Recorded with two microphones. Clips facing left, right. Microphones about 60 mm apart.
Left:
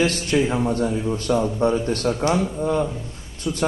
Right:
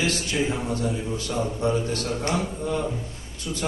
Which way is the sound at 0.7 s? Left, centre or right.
Left.